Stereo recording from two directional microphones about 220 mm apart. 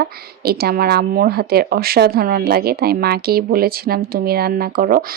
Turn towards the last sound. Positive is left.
turn(degrees=-40)  # may be behind; listen again after turning